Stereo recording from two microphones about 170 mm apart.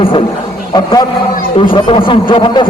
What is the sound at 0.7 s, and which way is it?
A man's voice, 25° left (ahead or behind).